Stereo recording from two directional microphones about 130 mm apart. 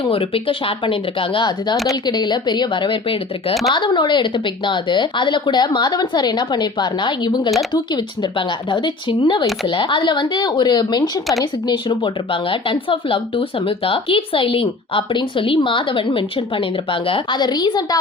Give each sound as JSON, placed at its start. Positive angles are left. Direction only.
{"t": 0.0, "sound": "speech", "side_deg": 45}
{"t": 3.5, "sound": "speech", "side_deg": 0}
{"t": 3.8, "sound": "speech", "side_deg": 35}